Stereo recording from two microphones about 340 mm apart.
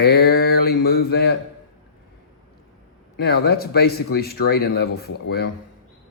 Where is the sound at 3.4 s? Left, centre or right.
Left.